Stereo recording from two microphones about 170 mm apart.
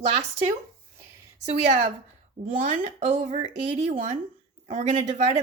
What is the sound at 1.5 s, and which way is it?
Speech, 45° right (ahead or behind).